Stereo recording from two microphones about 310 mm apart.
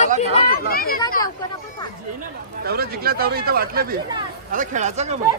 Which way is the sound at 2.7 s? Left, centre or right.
Right.